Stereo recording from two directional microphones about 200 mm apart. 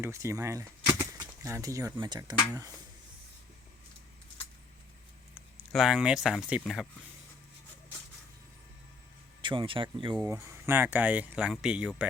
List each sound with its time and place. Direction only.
0.0 s speech: 15° right (ahead or behind)
5.3 s speech: centre (ahead or behind)
9.4 s speech: 25° right (ahead or behind); by 12.0 s 5° right (ahead or behind)